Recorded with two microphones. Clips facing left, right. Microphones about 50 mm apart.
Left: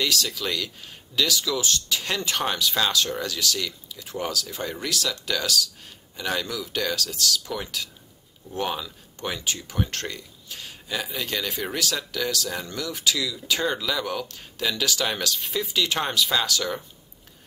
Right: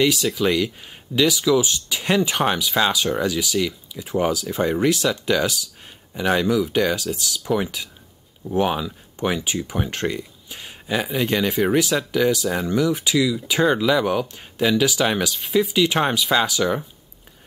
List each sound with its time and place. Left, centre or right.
0.0 s speech: centre
15.4 s speech: centre
15.7 s speech: centre